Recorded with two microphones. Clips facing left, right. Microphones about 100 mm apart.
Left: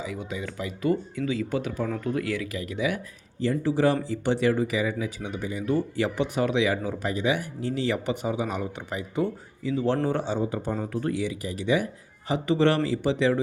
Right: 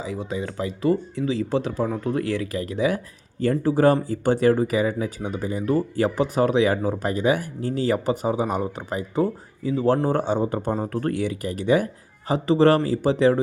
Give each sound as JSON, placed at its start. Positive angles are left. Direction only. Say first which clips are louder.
{"t": 0.0, "sound": "speech", "louder": "right 4 dB", "side_deg": -35}
{"t": 3.4, "sound": "speech", "louder": "right 4 dB", "side_deg": -45}